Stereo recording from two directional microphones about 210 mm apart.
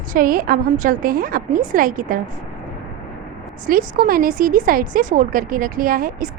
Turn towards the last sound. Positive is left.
turn(degrees=-40)  # may be behind; listen again after turning